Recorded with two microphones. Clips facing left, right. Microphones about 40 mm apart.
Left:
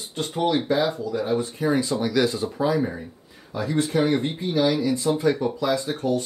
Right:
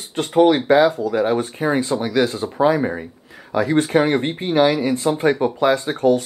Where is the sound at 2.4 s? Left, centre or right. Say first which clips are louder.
Right 6 dB; right.